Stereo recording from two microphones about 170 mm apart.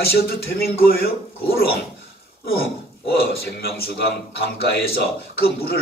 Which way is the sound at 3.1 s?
65° left (ahead or behind).